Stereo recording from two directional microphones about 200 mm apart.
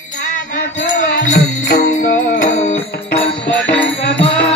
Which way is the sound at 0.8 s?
40° left (ahead or behind).